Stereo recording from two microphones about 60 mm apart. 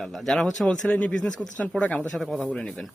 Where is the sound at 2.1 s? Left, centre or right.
Centre.